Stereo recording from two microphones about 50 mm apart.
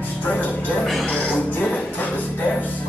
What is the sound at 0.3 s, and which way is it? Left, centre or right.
Music, left.